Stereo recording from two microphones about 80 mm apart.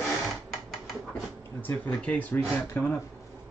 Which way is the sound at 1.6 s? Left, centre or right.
Left.